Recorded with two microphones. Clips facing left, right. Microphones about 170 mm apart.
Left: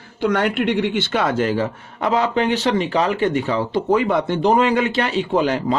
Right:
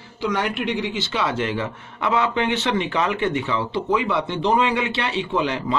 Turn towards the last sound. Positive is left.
turn(degrees=45)  # may be behind; listen again after turning